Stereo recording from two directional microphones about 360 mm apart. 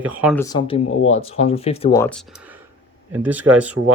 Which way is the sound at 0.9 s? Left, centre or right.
Left.